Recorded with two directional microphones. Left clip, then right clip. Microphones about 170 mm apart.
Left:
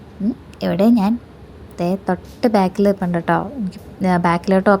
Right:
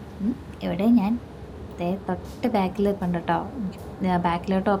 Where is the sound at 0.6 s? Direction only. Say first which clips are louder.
Left 7 dB; 40° left (ahead or behind).